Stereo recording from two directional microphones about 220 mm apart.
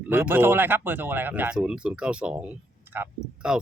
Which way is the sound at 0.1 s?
10° right (ahead or behind).